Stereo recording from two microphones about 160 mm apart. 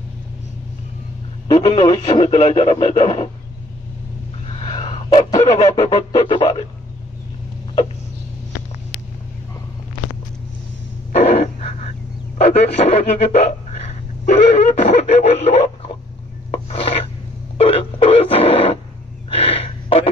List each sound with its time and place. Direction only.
1.5 s speech: 35° left (ahead or behind)
4.5 s a sound: 35° left (ahead or behind)
5.4 s goose: 45° left (ahead or behind)
6.1 s speech: 30° left (ahead or behind)
11.1 s a sound: 45° left (ahead or behind)
12.4 s speech: 45° left (ahead or behind)
13.8 s a sound: 45° left (ahead or behind)
16.5 s filing: 40° left (ahead or behind)
17.6 s speech: 35° left (ahead or behind)
19.2 s gasp: 40° left (ahead or behind)